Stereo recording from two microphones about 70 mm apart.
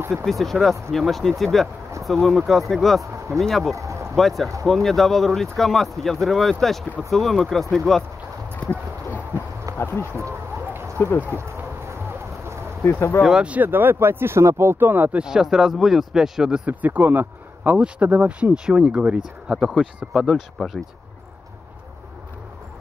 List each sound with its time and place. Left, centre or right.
0.1 s speech: centre
3.7 s a sound: right
4.1 s speech: centre
9.8 s a sound: left
10.1 s a sound: right
11.1 s speech: right
13.2 s speech: centre
13.6 s speech: right
15.1 s speech: centre
16.6 s speech: right; by 20.8 s centre